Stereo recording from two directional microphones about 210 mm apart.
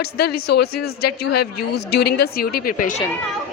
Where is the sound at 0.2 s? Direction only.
50° left (ahead or behind).